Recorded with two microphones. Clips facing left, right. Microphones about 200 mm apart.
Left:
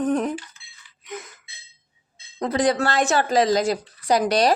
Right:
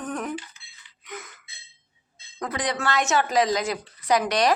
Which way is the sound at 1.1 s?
25° left (ahead or behind).